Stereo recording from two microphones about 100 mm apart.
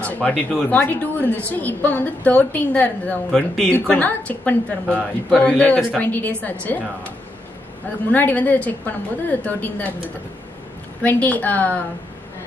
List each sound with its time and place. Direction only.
0.0 s a sound: 15° left (ahead or behind)
0.7 s a woman's voice: 20° left (ahead or behind)
8.1 s a woman's voice: 15° left (ahead or behind)
11.0 s a woman's voice: 15° left (ahead or behind)